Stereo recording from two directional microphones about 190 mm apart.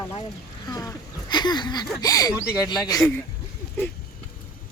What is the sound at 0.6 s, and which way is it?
Speech, 20° left (ahead or behind).